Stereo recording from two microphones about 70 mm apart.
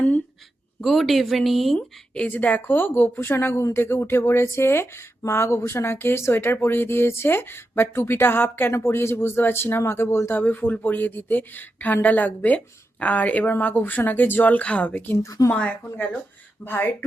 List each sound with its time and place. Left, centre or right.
0.8 s speech: centre
2.3 s speech: left
15.2 s speech: left
15.5 s speech: centre
16.6 s speech: left